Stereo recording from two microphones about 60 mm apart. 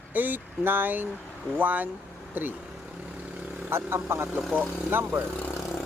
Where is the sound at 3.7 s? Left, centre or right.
Right.